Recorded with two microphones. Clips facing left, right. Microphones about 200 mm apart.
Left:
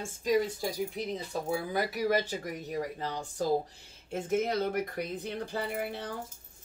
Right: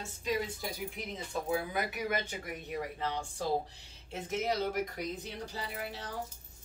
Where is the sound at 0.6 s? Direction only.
30° left (ahead or behind).